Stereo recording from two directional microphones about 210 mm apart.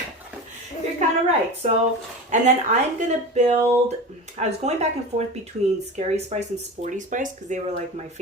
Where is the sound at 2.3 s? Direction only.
35° right (ahead or behind).